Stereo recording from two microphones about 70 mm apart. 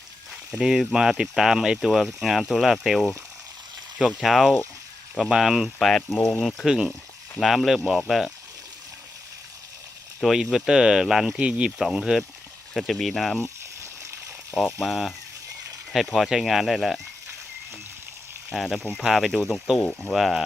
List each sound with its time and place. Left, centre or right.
0.5 s speech: centre
10.2 s speech: centre
11.3 s speech: centre
14.5 s speech: centre
18.5 s speech: centre